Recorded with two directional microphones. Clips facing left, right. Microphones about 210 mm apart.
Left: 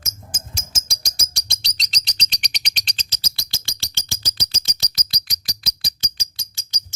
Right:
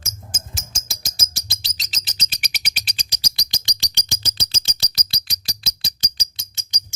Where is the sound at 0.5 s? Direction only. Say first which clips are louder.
Even; centre (ahead or behind); by 6.2 s 30° right (ahead or behind).